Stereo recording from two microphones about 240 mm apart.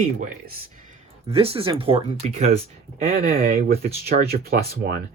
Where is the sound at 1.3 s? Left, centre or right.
Right.